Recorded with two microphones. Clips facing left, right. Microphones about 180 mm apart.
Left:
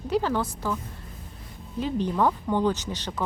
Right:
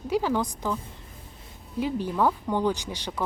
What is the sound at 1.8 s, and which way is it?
Speech, 10° right (ahead or behind).